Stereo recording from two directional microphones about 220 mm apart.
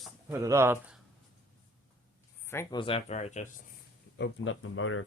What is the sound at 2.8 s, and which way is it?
Speech, 25° left (ahead or behind).